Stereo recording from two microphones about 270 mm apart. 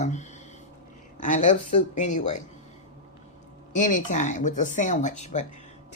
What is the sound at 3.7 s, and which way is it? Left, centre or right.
Speech, left.